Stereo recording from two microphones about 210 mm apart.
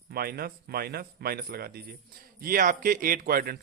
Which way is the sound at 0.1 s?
45° right (ahead or behind).